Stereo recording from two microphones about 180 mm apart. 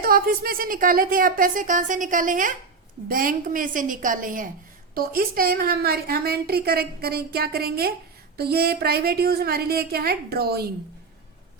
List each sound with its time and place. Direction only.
0.0 s a woman's voice: 55° right (ahead or behind)